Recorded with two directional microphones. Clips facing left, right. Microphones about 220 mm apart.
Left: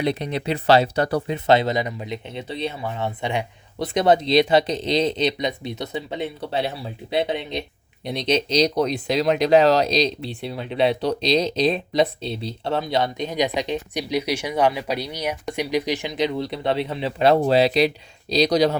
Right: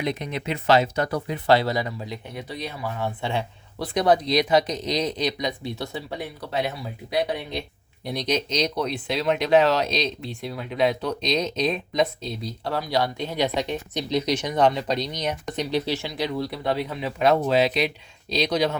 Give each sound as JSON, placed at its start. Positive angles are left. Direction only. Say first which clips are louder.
{"t": 0.0, "sound": "speech", "louder": "left 4 dB", "side_deg": 30}